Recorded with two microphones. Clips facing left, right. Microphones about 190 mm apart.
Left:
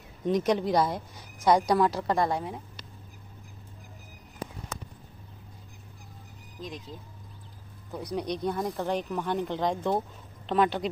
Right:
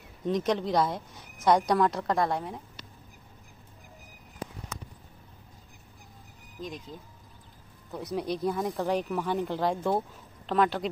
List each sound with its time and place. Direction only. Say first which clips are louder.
0.3 s speech: left 2 dB; 5° left (ahead or behind)
7.9 s speech: even; 5° right (ahead or behind)